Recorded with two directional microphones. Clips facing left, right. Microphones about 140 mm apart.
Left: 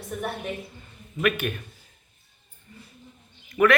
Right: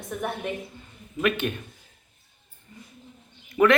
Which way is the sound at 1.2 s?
25° right (ahead or behind).